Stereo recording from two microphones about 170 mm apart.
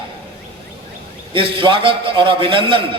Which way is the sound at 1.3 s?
30° right (ahead or behind).